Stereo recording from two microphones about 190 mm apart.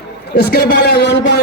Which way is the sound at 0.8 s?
60° left (ahead or behind).